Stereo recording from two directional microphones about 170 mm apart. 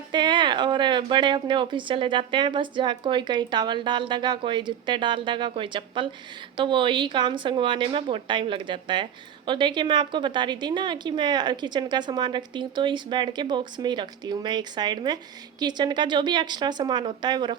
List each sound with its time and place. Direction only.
0.1 s a woman's voice: 25° right (ahead or behind)